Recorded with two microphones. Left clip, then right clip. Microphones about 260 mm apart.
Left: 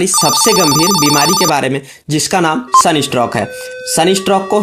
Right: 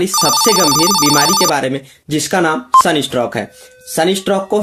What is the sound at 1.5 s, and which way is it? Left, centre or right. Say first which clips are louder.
Speech: left 2 dB; left.